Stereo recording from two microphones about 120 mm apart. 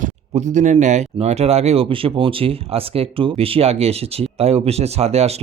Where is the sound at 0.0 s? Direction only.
85° right.